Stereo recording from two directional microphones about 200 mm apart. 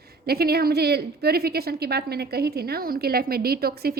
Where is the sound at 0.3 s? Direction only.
50° right (ahead or behind).